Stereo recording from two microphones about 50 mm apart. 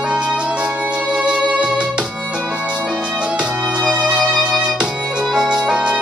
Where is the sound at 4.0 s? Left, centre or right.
Centre.